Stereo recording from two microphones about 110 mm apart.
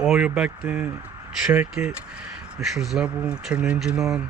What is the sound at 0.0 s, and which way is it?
Speech, 5° right (ahead or behind).